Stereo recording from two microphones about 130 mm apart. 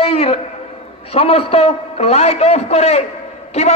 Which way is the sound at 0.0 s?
50° left (ahead or behind).